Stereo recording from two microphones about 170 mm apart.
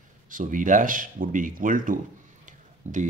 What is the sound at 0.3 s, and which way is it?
Speech, 50° right (ahead or behind).